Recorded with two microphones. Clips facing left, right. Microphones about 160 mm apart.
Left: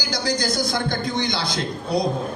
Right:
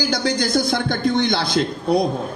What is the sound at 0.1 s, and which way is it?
A man's voice, 60° right (ahead or behind).